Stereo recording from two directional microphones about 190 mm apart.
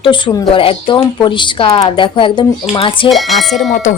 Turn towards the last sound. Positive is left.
turn(degrees=0)  # may be behind; listen again after turning